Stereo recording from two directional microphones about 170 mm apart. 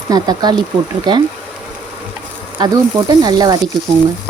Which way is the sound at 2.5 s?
25° right (ahead or behind).